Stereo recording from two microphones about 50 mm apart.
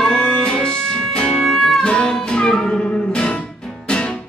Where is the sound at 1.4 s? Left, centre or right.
Centre.